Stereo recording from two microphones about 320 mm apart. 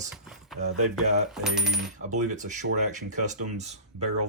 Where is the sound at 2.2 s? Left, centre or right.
Right.